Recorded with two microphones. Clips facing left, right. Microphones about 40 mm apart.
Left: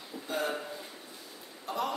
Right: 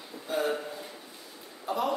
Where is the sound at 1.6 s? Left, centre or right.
Centre.